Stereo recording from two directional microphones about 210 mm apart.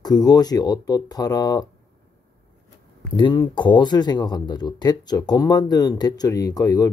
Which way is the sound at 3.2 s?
20° left (ahead or behind).